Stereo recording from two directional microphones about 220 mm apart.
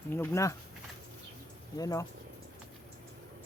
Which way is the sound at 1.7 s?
15° left (ahead or behind).